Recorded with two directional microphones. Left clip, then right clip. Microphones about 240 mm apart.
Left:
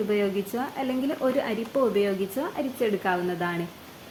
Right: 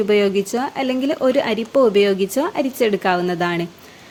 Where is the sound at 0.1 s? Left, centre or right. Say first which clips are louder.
Right 9 dB; right.